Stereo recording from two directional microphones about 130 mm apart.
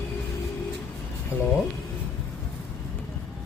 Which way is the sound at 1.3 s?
10° right (ahead or behind).